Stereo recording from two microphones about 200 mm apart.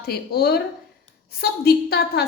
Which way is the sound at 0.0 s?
50° left (ahead or behind).